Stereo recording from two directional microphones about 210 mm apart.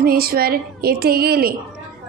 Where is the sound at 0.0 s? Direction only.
45° right (ahead or behind).